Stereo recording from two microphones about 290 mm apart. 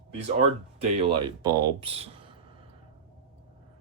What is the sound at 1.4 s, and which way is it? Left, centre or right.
Speech, centre.